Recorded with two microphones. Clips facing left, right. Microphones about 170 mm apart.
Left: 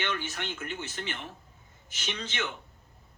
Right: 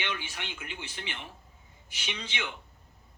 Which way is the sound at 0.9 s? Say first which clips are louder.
Left 4 dB; 45° left (ahead or behind).